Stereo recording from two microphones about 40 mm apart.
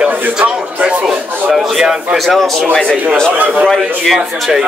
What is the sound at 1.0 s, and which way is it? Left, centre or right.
A man's voice, centre.